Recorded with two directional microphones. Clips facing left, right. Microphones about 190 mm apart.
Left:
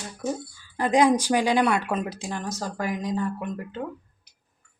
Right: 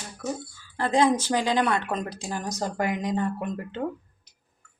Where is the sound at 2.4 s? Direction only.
20° right (ahead or behind).